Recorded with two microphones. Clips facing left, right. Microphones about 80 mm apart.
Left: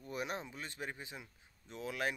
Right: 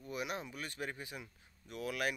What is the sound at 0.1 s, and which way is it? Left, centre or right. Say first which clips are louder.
Speech: even; left.